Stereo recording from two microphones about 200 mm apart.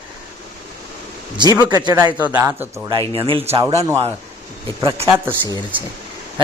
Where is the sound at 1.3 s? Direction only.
20° right (ahead or behind).